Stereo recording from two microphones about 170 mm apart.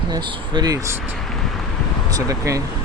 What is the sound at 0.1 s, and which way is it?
Speech, 25° right (ahead or behind).